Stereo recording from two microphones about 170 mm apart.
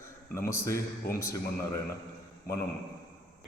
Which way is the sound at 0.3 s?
15° left (ahead or behind).